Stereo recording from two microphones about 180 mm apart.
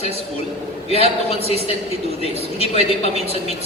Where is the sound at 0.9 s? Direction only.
35° left (ahead or behind).